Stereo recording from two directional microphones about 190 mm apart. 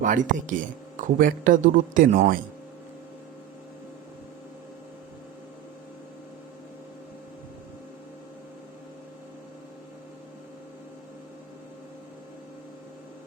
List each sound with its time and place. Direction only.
0.0 s speech: 40° right (ahead or behind)